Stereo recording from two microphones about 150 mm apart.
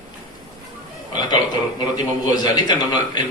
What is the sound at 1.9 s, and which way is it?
A man's voice, 30° left (ahead or behind).